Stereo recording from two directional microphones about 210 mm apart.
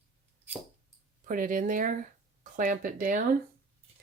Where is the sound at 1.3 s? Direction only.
40° right (ahead or behind).